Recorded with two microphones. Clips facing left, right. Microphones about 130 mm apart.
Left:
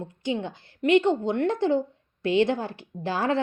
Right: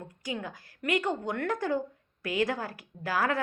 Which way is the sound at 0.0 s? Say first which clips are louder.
Left 7 dB; 25° left (ahead or behind).